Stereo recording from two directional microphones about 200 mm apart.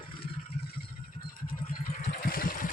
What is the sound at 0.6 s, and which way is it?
Vehicle, 50° left (ahead or behind).